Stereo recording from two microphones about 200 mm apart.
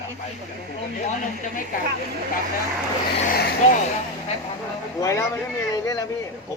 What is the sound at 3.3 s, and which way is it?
Speech, 50° left (ahead or behind).